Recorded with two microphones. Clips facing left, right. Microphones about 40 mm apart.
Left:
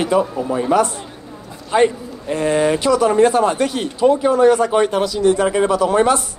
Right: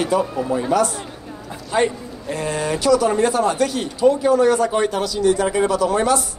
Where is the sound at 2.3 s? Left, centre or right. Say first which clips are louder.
Left 6 dB; left.